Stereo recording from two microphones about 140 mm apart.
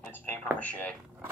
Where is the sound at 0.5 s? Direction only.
10° left (ahead or behind).